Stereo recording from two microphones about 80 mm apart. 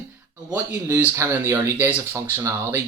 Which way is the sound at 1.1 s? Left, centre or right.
Right.